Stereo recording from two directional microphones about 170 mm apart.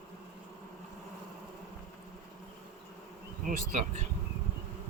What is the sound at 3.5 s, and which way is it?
Bee, 50° right (ahead or behind).